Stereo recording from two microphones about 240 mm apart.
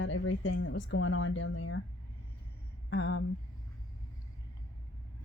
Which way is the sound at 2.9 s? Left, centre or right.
Left.